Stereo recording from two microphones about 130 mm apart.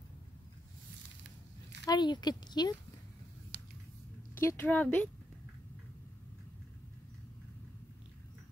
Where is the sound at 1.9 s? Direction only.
35° left (ahead or behind).